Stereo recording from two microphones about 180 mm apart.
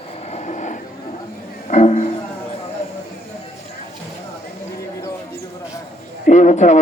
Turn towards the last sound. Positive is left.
turn(degrees=40)  # may be behind; listen again after turning